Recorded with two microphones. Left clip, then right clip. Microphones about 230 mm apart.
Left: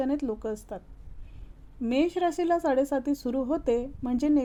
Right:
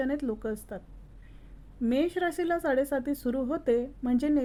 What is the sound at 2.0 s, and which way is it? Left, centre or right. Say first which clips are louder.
A woman's voice: left 3 dB; left.